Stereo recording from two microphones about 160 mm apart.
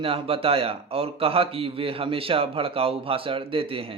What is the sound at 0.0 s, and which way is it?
A man's voice, 35° right (ahead or behind).